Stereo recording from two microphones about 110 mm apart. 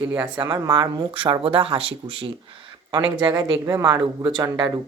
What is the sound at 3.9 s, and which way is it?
Speech, 45° right (ahead or behind).